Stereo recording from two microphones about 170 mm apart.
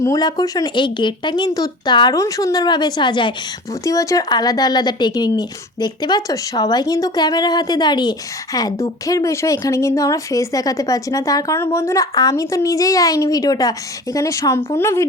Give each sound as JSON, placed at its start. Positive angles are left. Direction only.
{"t": 0.0, "sound": "speech", "side_deg": 20}